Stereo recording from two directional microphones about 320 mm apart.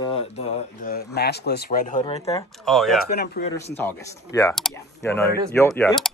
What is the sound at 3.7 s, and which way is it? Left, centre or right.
Speech, centre.